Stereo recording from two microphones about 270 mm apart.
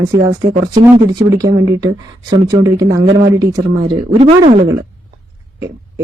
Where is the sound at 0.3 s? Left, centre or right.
Centre.